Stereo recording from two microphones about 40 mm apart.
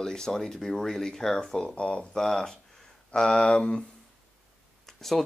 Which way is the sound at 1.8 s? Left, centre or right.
Left.